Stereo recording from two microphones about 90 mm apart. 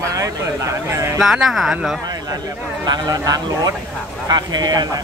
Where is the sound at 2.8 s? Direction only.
45° right (ahead or behind).